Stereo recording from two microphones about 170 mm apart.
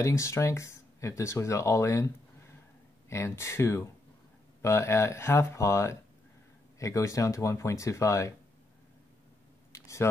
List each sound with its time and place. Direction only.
0.0 s speech: 15° left (ahead or behind)
3.1 s speech: 15° left (ahead or behind)
9.7 s a sound: 15° left (ahead or behind)